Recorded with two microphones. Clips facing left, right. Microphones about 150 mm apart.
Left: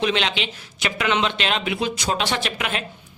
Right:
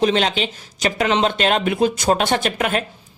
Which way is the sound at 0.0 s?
40° right (ahead or behind).